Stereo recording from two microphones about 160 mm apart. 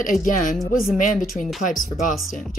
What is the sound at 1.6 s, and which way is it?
Speech, 55° left (ahead or behind).